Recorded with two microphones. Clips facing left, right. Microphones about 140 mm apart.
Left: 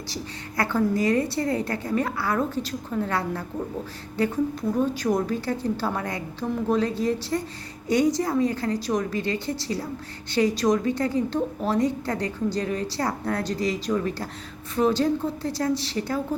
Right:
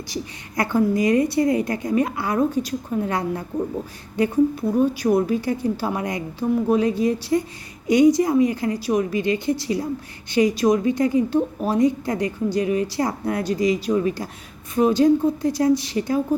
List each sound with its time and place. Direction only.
0.1 s a woman's voice: 15° right (ahead or behind)